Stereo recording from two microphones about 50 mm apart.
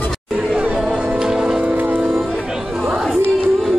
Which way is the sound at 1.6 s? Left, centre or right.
Right.